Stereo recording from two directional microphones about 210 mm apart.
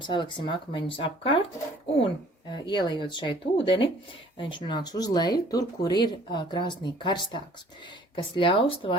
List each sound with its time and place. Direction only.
0.0 s speech: 25° left (ahead or behind)
2.6 s speech: 20° left (ahead or behind)